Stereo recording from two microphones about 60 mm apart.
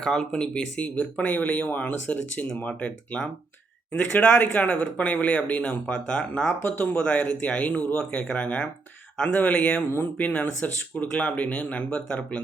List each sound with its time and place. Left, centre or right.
0.0 s speech: centre
6.6 s speech: left